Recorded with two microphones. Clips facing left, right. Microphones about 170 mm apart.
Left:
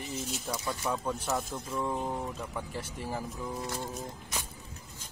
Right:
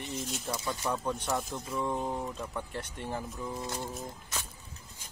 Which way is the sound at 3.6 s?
20° right (ahead or behind).